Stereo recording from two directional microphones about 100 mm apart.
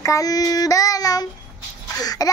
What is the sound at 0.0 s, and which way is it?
Child singing, 35° left (ahead or behind).